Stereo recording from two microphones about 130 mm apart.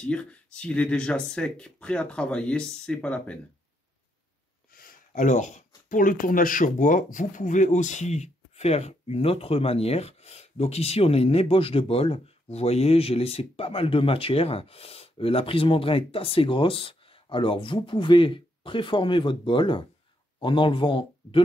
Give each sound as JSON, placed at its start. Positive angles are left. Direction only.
{"t": 0.0, "sound": "speech", "side_deg": 10}
{"t": 4.8, "sound": "a sound", "side_deg": 80}
{"t": 5.9, "sound": "speech", "side_deg": 90}